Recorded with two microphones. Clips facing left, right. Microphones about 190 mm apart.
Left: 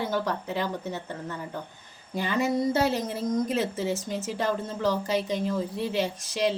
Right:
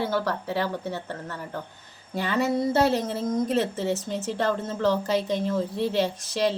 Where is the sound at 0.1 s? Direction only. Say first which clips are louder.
Right 2 dB; 15° left (ahead or behind).